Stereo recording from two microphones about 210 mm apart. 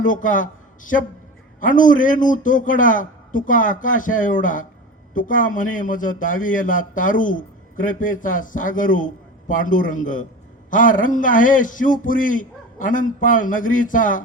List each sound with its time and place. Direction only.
0.0 s a man's voice: 40° left (ahead or behind)